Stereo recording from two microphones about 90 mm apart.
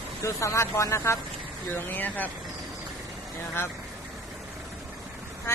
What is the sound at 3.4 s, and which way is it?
Speech, 25° left (ahead or behind).